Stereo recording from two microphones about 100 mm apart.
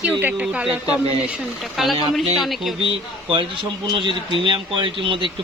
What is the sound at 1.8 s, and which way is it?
Speech, centre (ahead or behind).